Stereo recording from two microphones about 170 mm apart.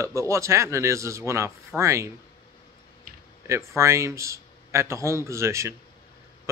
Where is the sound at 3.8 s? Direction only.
15° right (ahead or behind).